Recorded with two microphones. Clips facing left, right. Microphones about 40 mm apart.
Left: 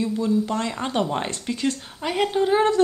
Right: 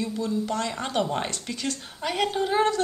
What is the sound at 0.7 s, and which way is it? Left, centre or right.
Speech, centre.